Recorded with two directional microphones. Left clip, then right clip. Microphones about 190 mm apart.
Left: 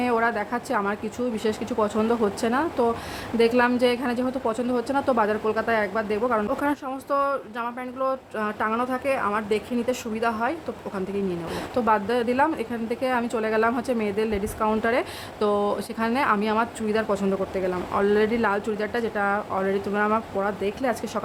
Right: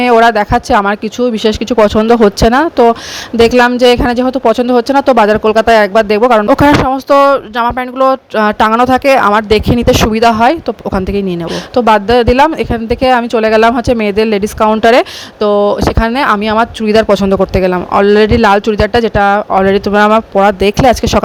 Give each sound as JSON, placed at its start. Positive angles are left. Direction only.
{"t": 0.0, "sound": "speech", "side_deg": -40}